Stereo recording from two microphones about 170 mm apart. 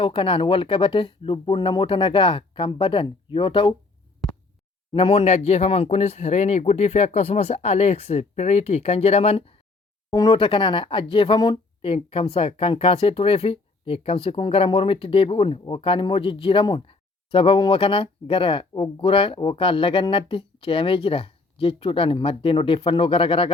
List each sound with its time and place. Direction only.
0.0 s speech: 30° left (ahead or behind)
4.9 s speech: 30° left (ahead or behind)